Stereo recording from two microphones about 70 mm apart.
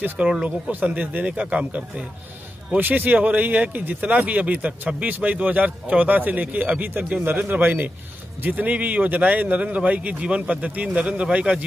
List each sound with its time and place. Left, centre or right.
0.2 s a man's voice: centre